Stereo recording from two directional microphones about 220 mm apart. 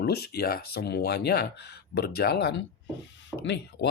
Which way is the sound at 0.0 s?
45° left (ahead or behind).